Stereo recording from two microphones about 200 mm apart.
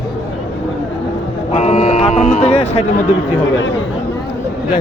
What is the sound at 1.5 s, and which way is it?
Speech, 35° left (ahead or behind).